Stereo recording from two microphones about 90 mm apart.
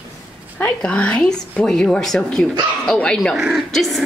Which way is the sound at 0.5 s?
15° left (ahead or behind).